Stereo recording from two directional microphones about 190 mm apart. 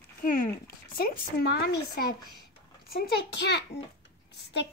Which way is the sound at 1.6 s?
50° left (ahead or behind).